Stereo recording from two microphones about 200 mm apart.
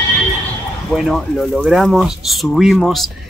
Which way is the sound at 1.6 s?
Centre (ahead or behind).